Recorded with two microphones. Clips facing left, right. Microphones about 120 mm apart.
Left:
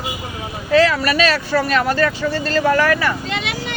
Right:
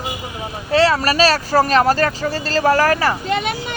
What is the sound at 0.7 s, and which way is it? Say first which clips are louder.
Speech: left 1 dB; 30° right (ahead or behind).